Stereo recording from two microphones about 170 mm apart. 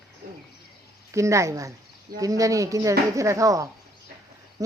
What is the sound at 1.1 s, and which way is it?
Speech, 15° right (ahead or behind).